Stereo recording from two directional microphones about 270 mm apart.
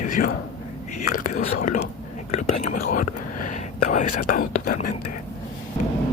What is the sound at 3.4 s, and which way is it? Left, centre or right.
Whispering, left.